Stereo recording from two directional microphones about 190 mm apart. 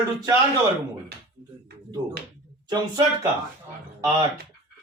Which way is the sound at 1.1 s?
60° right (ahead or behind).